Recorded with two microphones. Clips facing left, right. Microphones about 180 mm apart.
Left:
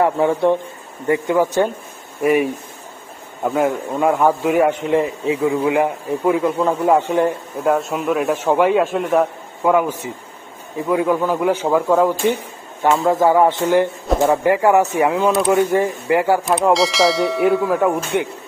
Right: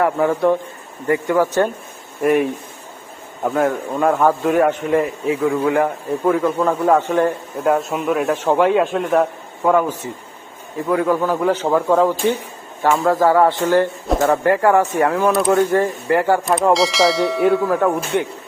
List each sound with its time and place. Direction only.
0.0 s a man's voice: 25° left (ahead or behind)
2.2 s bell: 5° left (ahead or behind)
3.4 s speech: centre (ahead or behind)
4.9 s speech: 25° left (ahead or behind)
7.6 s bell: centre (ahead or behind)
9.6 s speech: 10° left (ahead or behind)
15.3 s bell: centre (ahead or behind)
15.7 s speech: 15° left (ahead or behind)
16.5 s bell: centre (ahead or behind)